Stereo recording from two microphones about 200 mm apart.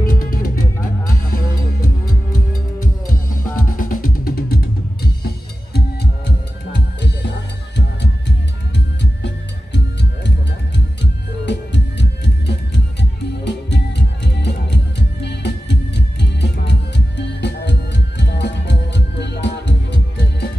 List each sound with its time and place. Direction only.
0.0 s music: 45° left (ahead or behind)
11.0 s music: 60° left (ahead or behind)